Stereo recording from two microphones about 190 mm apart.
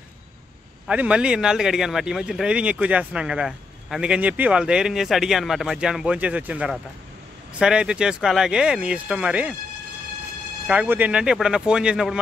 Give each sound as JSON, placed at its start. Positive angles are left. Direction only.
{"t": 0.8, "sound": "speech", "side_deg": -5}
{"t": 10.7, "sound": "speech", "side_deg": -10}